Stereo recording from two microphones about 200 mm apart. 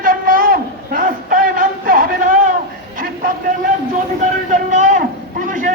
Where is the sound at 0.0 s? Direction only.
45° right (ahead or behind).